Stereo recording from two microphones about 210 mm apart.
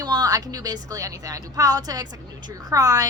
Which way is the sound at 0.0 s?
20° right (ahead or behind).